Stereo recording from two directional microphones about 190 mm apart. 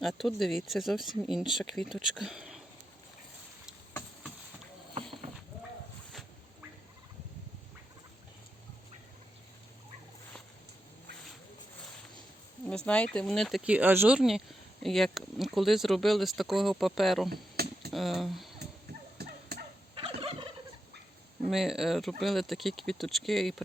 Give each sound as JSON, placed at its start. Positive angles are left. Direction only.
{"t": 0.0, "sound": "speech", "side_deg": 0}
{"t": 12.6, "sound": "speech", "side_deg": 5}
{"t": 17.2, "sound": "a sound", "side_deg": -55}
{"t": 17.9, "sound": "speech", "side_deg": 0}
{"t": 19.2, "sound": "a sound", "side_deg": -55}
{"t": 20.0, "sound": "fowl", "side_deg": -30}
{"t": 21.4, "sound": "speech", "side_deg": 0}